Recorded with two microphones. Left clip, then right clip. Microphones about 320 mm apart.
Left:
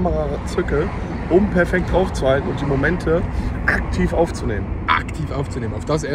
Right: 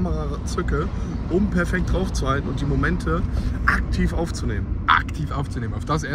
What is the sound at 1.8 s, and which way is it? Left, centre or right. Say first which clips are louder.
Speech: left 8 dB; centre.